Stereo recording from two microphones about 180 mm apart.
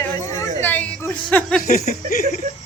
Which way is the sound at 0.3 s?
10° left (ahead or behind).